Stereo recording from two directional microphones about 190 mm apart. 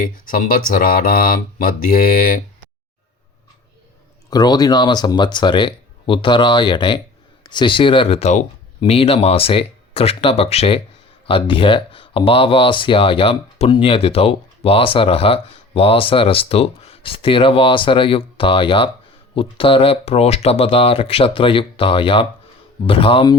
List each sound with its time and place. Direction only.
0.3 s speech: 45° left (ahead or behind)
4.3 s speech: 20° left (ahead or behind)